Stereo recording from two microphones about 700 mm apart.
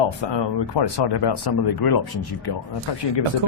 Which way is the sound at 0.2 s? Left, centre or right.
Left.